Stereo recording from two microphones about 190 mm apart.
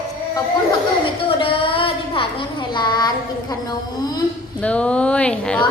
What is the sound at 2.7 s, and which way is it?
Speech, 25° left (ahead or behind).